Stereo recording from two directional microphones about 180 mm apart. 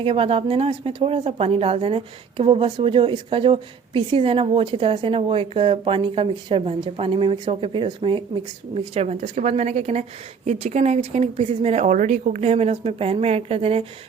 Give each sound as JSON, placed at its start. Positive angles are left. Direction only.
{"t": 0.0, "sound": "a woman's voice", "side_deg": -30}